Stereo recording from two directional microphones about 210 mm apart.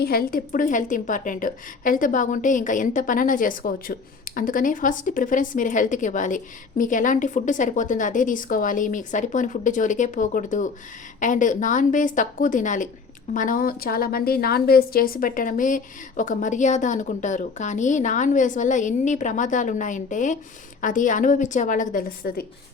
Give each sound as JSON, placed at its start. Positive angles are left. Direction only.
{"t": 0.0, "sound": "a woman's voice", "side_deg": 45}